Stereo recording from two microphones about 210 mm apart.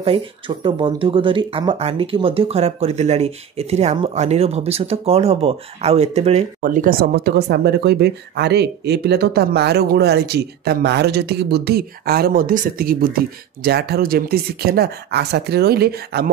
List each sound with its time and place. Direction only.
0.0 s speech: 25° right (ahead or behind); by 16.3 s 50° right (ahead or behind)